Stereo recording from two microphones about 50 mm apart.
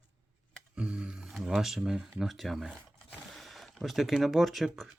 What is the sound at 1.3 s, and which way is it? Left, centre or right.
Speech, centre.